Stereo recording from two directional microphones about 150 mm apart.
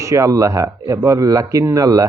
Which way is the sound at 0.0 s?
20° right (ahead or behind).